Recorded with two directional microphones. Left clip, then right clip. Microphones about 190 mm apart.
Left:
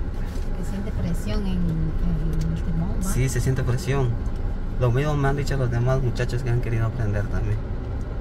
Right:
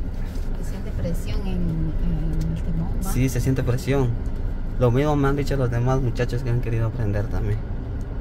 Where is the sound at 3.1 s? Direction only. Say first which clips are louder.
Right 3 dB; 30° right (ahead or behind).